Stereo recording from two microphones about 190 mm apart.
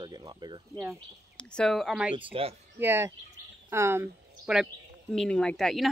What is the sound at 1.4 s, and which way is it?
Speech, 5° left (ahead or behind).